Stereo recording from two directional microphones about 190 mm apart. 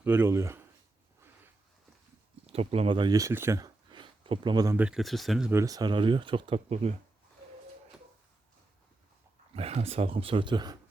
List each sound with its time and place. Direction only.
0.0 s speech: 10° right (ahead or behind)
2.5 s speech: 30° right (ahead or behind)
4.8 s speech: 5° right (ahead or behind)
5.5 s speech: 15° right (ahead or behind); by 6.9 s 30° right (ahead or behind)
9.6 s speech: 30° right (ahead or behind)